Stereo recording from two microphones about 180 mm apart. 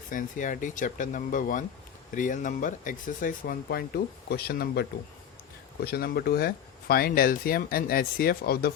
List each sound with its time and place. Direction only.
0.1 s speech: 50° left (ahead or behind)